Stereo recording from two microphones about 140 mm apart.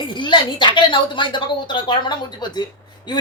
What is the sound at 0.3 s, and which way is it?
Speech, 35° left (ahead or behind).